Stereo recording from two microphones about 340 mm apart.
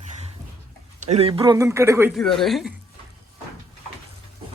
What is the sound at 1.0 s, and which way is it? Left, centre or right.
Speech, centre.